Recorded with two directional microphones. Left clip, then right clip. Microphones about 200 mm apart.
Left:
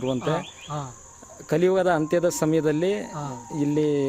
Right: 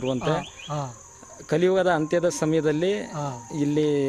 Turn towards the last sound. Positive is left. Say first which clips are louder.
# even
turn(degrees=5)  # may be behind; listen again after turning